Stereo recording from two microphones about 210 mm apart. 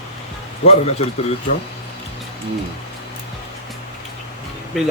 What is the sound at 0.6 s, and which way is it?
Speech, 30° left (ahead or behind).